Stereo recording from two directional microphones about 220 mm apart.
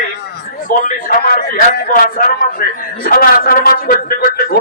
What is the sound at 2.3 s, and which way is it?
A man's voice, 40° left (ahead or behind).